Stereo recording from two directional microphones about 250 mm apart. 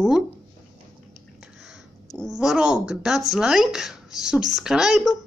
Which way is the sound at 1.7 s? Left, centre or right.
Centre.